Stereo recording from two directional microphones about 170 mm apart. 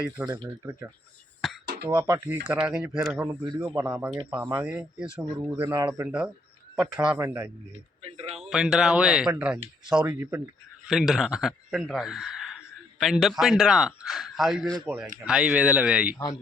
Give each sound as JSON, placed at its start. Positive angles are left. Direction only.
{"t": 0.3, "sound": "speech", "side_deg": -20}
{"t": 1.6, "sound": "a sound", "side_deg": -65}
{"t": 2.0, "sound": "speech", "side_deg": -15}
{"t": 2.7, "sound": "speech", "side_deg": -5}
{"t": 3.2, "sound": "speech", "side_deg": -20}
{"t": 8.0, "sound": "speech", "side_deg": -35}
{"t": 8.4, "sound": "speech", "side_deg": -5}